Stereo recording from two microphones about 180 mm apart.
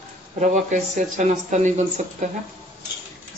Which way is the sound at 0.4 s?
45° right (ahead or behind).